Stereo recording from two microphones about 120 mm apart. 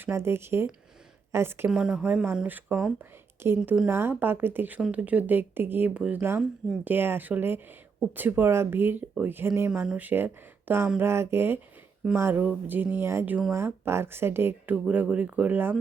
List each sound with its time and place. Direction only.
0.0 s speech: 20° right (ahead or behind)
1.7 s speech: 5° right (ahead or behind)